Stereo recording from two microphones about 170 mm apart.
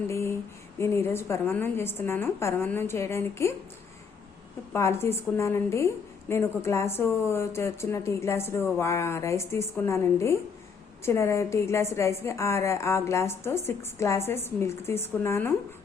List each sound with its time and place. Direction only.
0.1 s a sound: 15° left (ahead or behind)
0.8 s a woman's voice: 15° left (ahead or behind)
4.7 s a woman's voice: 15° left (ahead or behind)